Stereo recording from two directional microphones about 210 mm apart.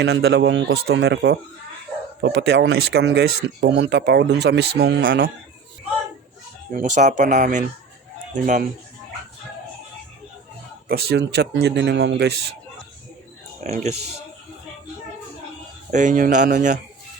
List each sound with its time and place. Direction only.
0.0 s a man's voice: 55° right (ahead or behind)
6.7 s speech: 35° right (ahead or behind)
10.8 s speech: 50° right (ahead or behind)
13.7 s speech: 30° right (ahead or behind)
15.9 s speech: 35° right (ahead or behind)